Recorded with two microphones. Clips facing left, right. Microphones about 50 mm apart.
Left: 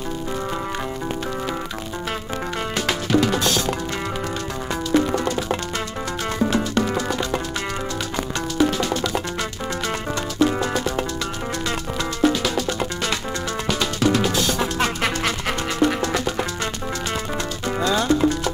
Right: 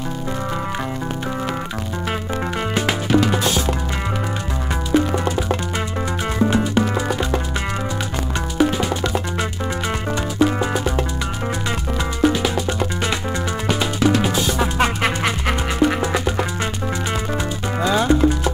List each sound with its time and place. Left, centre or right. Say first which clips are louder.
13.7 s music: right 2 dB; centre
17.7 s music: right 3 dB; centre